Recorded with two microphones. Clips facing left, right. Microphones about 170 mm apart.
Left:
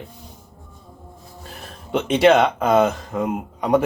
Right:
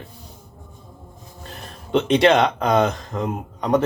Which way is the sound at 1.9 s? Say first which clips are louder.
Left 1 dB; 5° left (ahead or behind).